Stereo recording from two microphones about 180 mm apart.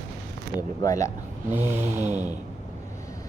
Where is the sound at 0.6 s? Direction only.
20° left (ahead or behind).